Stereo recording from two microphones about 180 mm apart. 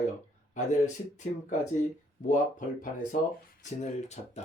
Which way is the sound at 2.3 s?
45° left (ahead or behind).